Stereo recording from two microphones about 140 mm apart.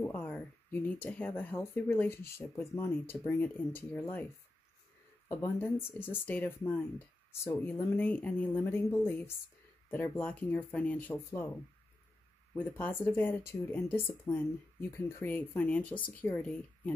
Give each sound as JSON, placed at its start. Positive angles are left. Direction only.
{"t": 0.0, "sound": "speech", "side_deg": 10}
{"t": 5.3, "sound": "speech", "side_deg": 15}
{"t": 12.5, "sound": "speech", "side_deg": 15}